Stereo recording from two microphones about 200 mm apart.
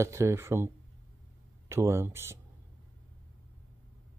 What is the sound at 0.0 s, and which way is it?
Speech, 15° right (ahead or behind).